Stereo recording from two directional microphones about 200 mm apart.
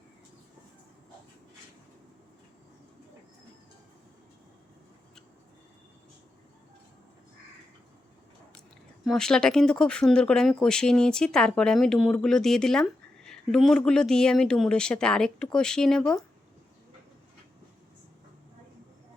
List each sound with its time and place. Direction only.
9.0 s speech: 5° left (ahead or behind)